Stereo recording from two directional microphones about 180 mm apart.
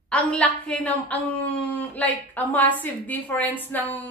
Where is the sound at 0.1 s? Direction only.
5° left (ahead or behind).